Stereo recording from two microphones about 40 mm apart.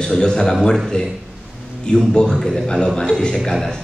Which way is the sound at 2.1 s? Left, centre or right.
Left.